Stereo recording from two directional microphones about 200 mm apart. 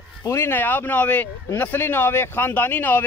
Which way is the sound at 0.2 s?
15° left (ahead or behind).